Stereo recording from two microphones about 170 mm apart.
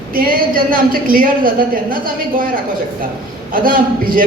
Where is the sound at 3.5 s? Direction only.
55° right (ahead or behind).